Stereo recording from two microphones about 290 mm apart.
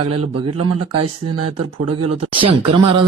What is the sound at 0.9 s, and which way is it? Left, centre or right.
Speech, right.